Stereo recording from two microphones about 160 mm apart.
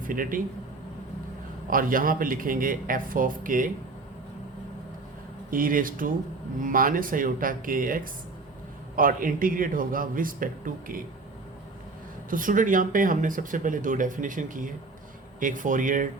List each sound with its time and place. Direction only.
0.1 s speech: 60° right (ahead or behind)
1.7 s speech: 60° right (ahead or behind)
5.5 s speech: 60° right (ahead or behind)
12.3 s speech: 60° right (ahead or behind)